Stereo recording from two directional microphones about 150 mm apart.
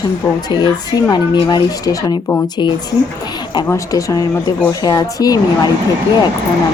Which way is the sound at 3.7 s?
20° left (ahead or behind).